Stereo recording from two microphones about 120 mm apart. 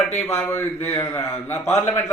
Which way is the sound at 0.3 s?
20° left (ahead or behind).